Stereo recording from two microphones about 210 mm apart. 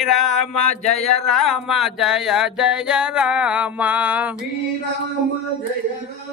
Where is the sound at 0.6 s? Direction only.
30° left (ahead or behind).